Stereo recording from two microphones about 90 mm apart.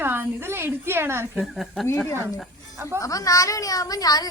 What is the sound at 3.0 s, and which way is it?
A child's voice, 40° left (ahead or behind).